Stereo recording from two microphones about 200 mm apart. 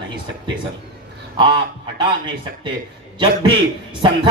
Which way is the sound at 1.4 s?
25° right (ahead or behind).